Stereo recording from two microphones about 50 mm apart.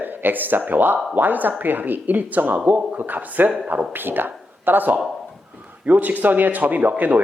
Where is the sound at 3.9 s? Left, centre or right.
Right.